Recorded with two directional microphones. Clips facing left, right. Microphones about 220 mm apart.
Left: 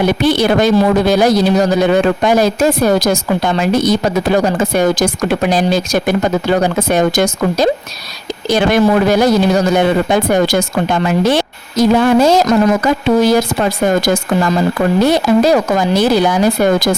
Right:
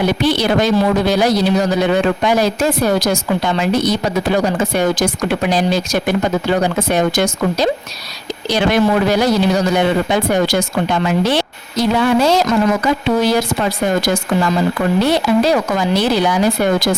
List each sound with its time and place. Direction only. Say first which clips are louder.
0.1 s speech: left 3 dB; 50° left (ahead or behind)